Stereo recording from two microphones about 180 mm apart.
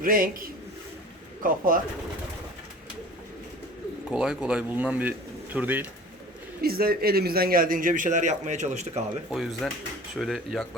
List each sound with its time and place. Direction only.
0.0 s a man's voice: 50° right (ahead or behind)
4.1 s speech: 5° right (ahead or behind)
6.6 s a man's voice: 55° right (ahead or behind); by 9.0 s 40° right (ahead or behind)
9.3 s speech: centre (ahead or behind)